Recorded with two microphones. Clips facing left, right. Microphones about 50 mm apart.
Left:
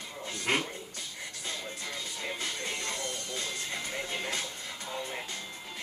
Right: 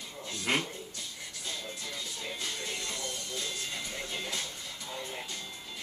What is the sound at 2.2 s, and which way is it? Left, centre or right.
Music, left.